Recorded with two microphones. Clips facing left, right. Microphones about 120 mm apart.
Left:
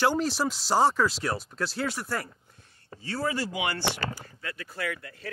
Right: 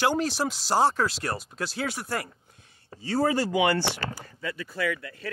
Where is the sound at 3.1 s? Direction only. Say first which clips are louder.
Right 6 dB; 40° right (ahead or behind).